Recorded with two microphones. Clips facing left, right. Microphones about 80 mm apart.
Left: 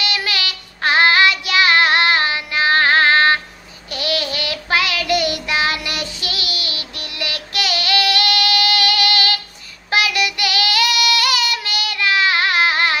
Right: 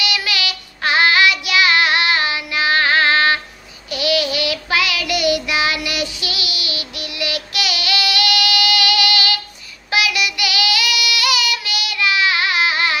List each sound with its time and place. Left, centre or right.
0.0 s child singing: left